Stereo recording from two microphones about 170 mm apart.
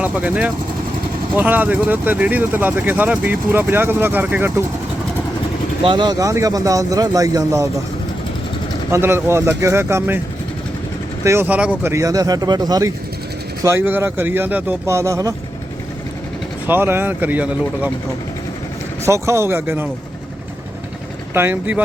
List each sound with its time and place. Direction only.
0.0 s speech: 10° right (ahead or behind)
5.8 s a man's voice: 30° right (ahead or behind)
8.9 s speech: 15° right (ahead or behind)
11.2 s a man's voice: 15° right (ahead or behind)
16.6 s speech: 10° right (ahead or behind)
19.0 s speech: 15° right (ahead or behind)
21.3 s speech: 10° right (ahead or behind)